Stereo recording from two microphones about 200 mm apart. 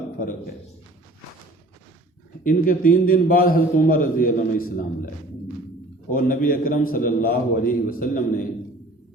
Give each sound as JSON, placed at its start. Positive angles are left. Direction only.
{"t": 2.4, "sound": "a man's voice", "side_deg": 45}
{"t": 6.1, "sound": "a man's voice", "side_deg": 45}